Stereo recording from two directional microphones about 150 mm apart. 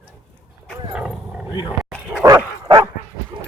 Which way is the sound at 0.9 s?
5° right (ahead or behind).